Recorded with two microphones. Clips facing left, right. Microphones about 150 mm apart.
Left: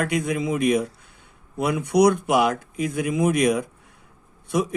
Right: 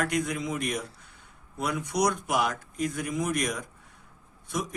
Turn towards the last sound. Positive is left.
turn(degrees=60)  # may be behind; listen again after turning